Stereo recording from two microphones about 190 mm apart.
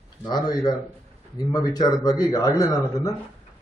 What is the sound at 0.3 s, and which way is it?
A man's voice, 20° left (ahead or behind).